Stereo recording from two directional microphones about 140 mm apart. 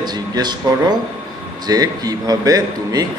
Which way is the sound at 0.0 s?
30° right (ahead or behind).